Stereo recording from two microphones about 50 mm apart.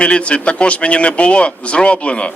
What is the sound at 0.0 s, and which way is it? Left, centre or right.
Speech, left.